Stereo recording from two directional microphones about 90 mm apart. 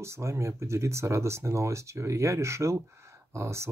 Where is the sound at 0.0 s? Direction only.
30° right (ahead or behind).